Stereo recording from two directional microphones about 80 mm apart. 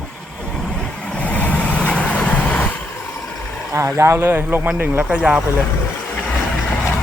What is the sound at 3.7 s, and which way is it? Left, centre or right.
Speech, right.